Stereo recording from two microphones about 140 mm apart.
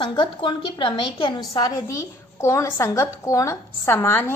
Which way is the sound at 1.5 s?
25° left (ahead or behind).